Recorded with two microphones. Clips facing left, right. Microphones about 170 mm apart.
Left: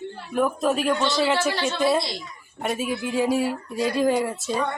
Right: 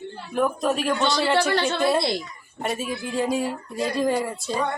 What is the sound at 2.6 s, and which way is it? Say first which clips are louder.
Speech: left 2 dB; centre (ahead or behind).